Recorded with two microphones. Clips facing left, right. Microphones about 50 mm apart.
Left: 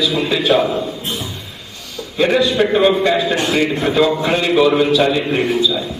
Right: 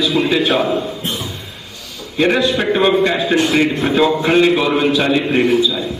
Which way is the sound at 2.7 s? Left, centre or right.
Centre.